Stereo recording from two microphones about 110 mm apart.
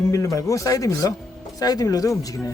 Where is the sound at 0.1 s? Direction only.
30° left (ahead or behind).